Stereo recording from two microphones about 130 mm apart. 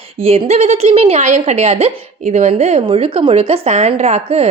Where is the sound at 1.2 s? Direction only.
60° right (ahead or behind).